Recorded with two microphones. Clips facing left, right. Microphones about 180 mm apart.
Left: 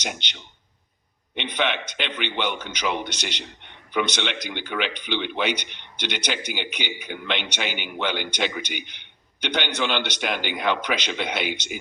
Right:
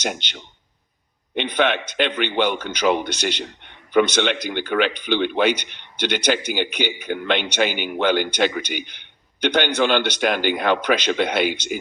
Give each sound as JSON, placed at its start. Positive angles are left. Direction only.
{"t": 0.0, "sound": "speech", "side_deg": -50}